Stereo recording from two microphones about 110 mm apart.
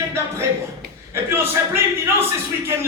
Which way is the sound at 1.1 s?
25° right (ahead or behind).